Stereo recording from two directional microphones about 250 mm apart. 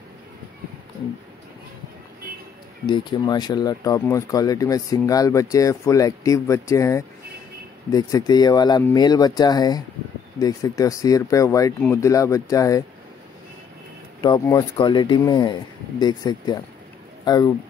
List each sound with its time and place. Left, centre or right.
2.9 s speech: centre
14.2 s speech: centre
17.2 s a sound: centre